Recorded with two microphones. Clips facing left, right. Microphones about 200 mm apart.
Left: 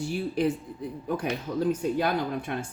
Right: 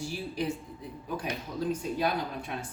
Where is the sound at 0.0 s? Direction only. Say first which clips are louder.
Left 6 dB; 55° left (ahead or behind).